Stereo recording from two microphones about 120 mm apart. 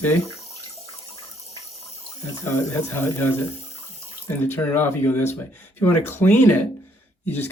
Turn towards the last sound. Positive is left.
turn(degrees=15)  # may be behind; listen again after turning